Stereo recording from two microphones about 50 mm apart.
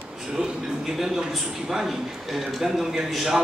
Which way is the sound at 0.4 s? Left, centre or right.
Centre.